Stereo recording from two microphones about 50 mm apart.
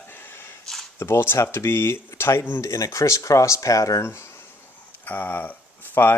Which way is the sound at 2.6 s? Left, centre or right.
Left.